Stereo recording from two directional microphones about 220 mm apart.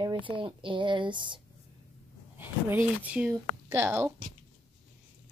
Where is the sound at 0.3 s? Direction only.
20° right (ahead or behind).